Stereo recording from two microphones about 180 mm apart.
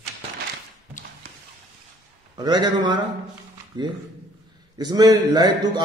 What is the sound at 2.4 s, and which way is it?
A man's voice, 25° right (ahead or behind).